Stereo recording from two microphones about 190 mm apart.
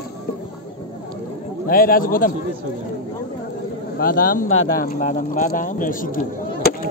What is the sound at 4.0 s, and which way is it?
Speech, 50° left (ahead or behind).